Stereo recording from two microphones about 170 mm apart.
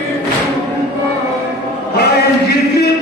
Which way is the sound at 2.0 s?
70° left (ahead or behind).